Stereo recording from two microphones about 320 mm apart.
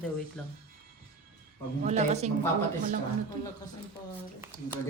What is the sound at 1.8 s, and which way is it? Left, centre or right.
Speech, right.